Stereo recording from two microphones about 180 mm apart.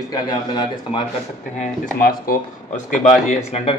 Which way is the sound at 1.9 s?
50° left (ahead or behind).